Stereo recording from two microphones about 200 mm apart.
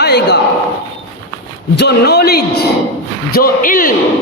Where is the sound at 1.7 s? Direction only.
55° left (ahead or behind).